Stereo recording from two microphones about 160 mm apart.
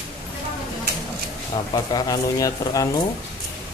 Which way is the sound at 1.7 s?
25° left (ahead or behind).